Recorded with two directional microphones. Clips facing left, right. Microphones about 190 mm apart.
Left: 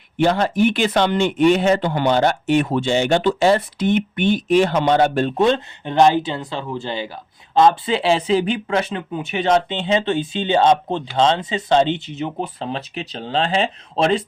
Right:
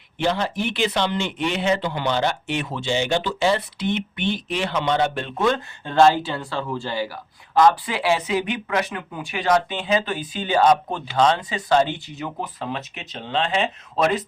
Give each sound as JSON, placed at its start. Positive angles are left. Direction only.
{"t": 0.2, "sound": "speech", "side_deg": 50}
{"t": 5.4, "sound": "speech", "side_deg": 20}